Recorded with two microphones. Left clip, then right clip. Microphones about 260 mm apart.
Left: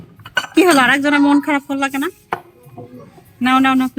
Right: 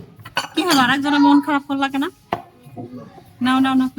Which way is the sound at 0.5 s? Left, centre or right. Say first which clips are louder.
Left 5 dB; centre.